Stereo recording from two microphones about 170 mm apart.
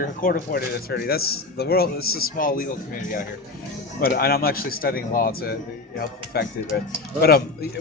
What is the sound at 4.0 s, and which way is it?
A man's voice, 60° left (ahead or behind).